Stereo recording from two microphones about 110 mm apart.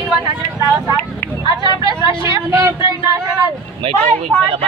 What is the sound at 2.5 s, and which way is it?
Speech, 30° right (ahead or behind).